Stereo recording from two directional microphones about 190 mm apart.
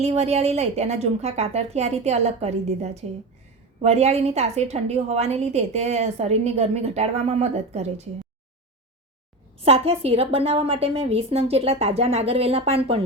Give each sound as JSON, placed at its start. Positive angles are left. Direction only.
{"t": 0.0, "sound": "a woman's voice", "side_deg": -35}
{"t": 9.6, "sound": "a woman's voice", "side_deg": -30}